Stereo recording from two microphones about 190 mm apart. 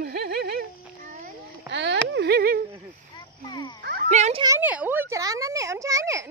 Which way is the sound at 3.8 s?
55° right (ahead or behind).